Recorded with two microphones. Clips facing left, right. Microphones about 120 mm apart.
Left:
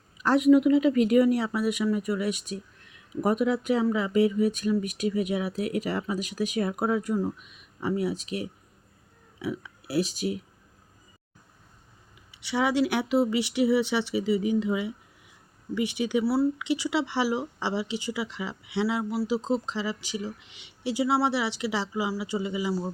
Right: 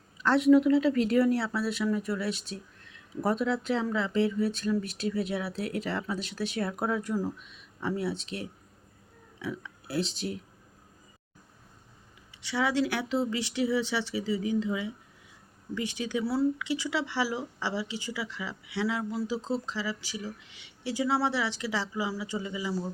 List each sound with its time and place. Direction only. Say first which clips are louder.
0.2 s speech: left 2 dB; 10° left (ahead or behind)
12.3 s speech: left 3 dB; 15° left (ahead or behind)